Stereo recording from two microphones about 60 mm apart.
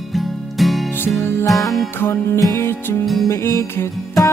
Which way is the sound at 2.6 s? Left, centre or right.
Left.